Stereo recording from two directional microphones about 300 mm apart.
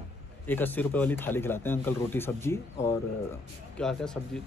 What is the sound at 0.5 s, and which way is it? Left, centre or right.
Speech, centre.